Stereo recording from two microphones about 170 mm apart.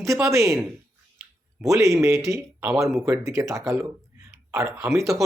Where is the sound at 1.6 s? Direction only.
20° right (ahead or behind).